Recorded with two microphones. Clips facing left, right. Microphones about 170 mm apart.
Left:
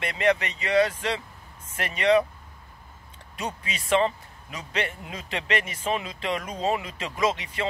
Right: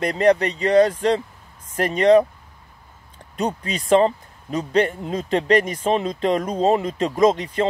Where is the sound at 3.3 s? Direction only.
35° right (ahead or behind).